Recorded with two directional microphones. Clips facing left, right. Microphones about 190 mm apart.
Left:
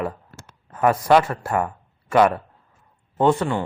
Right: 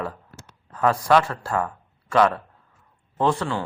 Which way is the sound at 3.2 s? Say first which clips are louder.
Left 4 dB; 25° left (ahead or behind).